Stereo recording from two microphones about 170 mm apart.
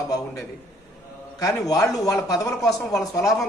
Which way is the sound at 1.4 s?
20° left (ahead or behind).